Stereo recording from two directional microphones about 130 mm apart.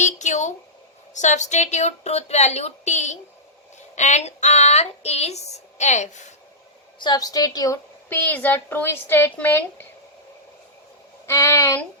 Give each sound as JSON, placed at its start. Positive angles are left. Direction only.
{"t": 0.0, "sound": "a sound", "side_deg": 65}
{"t": 1.1, "sound": "speech", "side_deg": 65}
{"t": 7.0, "sound": "a woman's voice", "side_deg": 30}
{"t": 8.1, "sound": "a woman's voice", "side_deg": 15}
{"t": 11.3, "sound": "a woman's voice", "side_deg": 20}